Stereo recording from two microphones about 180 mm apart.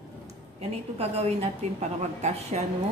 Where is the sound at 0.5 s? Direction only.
35° right (ahead or behind).